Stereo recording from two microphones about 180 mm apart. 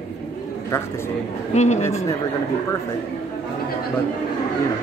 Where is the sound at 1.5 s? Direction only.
40° left (ahead or behind).